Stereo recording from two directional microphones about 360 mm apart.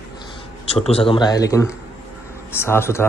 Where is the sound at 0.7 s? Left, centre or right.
Centre.